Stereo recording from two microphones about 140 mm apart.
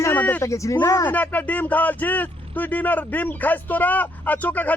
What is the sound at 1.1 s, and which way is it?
Speech, 10° left (ahead or behind).